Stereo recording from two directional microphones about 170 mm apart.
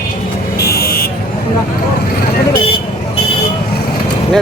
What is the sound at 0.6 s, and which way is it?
Buzzer, 65° left (ahead or behind).